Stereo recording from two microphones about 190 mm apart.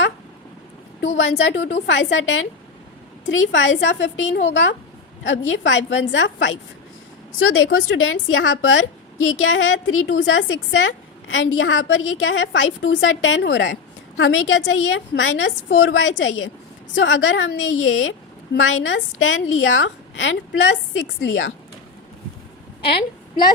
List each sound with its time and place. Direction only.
1.0 s a woman's voice: 75° left (ahead or behind)
7.3 s a woman's voice: 90° left
14.2 s a woman's voice: 90° left